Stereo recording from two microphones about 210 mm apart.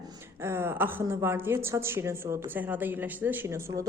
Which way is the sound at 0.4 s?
10° right (ahead or behind).